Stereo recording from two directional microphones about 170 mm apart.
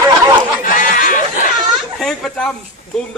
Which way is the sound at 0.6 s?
55° left (ahead or behind).